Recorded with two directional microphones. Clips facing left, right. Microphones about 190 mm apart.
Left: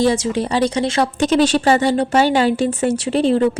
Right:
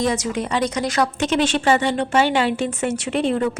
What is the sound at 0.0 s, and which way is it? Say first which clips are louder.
Speech: left 5 dB; 30° left (ahead or behind).